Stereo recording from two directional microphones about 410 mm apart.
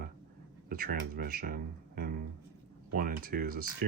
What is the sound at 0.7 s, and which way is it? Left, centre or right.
Speech, right.